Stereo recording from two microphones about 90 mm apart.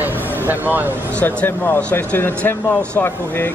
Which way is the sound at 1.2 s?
20° left (ahead or behind).